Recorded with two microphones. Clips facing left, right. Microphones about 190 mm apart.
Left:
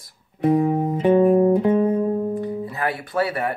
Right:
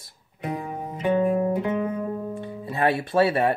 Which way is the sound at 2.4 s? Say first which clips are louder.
Even; 25° right (ahead or behind).